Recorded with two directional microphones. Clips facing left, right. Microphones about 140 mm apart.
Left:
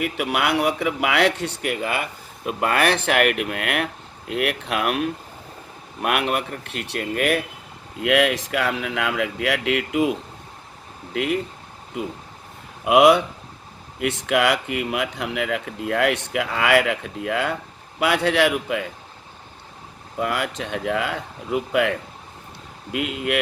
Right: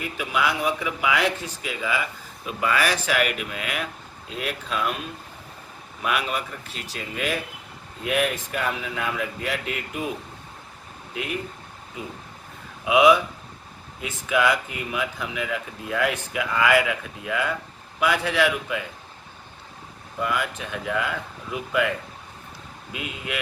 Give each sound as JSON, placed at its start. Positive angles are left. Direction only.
{"t": 0.0, "sound": "speech", "side_deg": 70}
{"t": 6.0, "sound": "speech", "side_deg": 60}
{"t": 8.0, "sound": "speech", "side_deg": 80}
{"t": 12.8, "sound": "speech", "side_deg": 70}
{"t": 20.1, "sound": "speech", "side_deg": 65}